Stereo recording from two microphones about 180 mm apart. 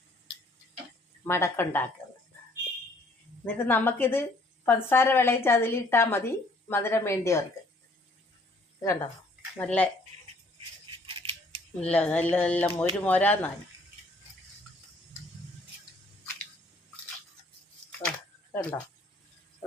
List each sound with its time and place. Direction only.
1.2 s a woman's voice: 15° left (ahead or behind)
3.4 s a woman's voice: 10° left (ahead or behind)
8.8 s a woman's voice: 15° left (ahead or behind)
11.0 s scissors: 30° right (ahead or behind)
11.8 s a woman's voice: 5° left (ahead or behind)